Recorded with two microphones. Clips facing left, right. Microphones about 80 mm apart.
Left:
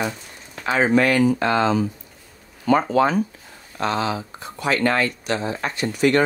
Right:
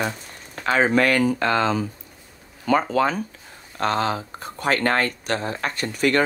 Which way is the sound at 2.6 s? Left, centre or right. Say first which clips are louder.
Left 2 dB; left.